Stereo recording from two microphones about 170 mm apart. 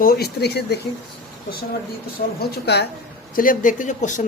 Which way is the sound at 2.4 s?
70° left (ahead or behind).